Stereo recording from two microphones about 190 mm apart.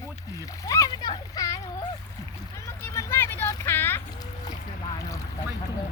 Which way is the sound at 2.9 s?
10° left (ahead or behind).